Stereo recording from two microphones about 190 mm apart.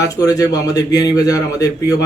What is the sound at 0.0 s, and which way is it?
A man's voice, 20° left (ahead or behind).